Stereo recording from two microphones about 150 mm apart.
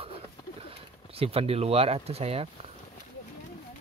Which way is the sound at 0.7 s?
40° right (ahead or behind).